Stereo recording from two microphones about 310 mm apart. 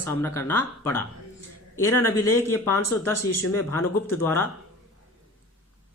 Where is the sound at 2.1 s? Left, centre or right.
Left.